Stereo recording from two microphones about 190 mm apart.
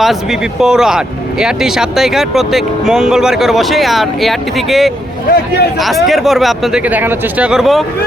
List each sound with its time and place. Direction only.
0.0 s speech: centre (ahead or behind)
5.3 s a man's voice: 50° left (ahead or behind)
6.1 s speech: centre (ahead or behind)